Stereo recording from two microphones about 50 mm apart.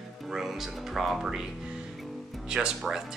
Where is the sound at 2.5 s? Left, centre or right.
Centre.